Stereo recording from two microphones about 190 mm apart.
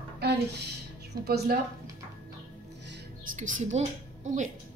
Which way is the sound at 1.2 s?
55° right (ahead or behind).